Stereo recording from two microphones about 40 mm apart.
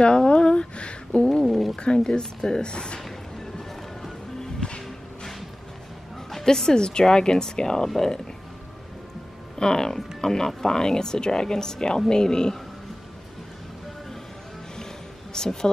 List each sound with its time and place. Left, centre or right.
0.0 s a sound: left
1.4 s a sound: centre
2.0 s speech: centre
4.6 s music: centre
6.3 s speech: centre
9.6 s speech: centre
15.3 s a woman's voice: centre